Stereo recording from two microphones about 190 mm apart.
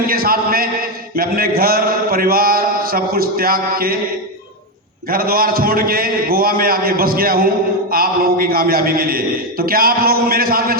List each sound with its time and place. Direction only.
0.0 s a man's voice: 50° right (ahead or behind)
5.0 s a man's voice: 50° right (ahead or behind)